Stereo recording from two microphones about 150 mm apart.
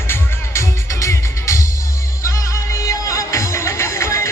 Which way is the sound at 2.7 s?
20° left (ahead or behind).